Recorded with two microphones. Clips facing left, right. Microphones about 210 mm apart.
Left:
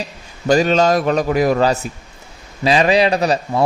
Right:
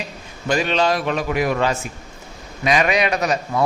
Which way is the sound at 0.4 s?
40° left (ahead or behind).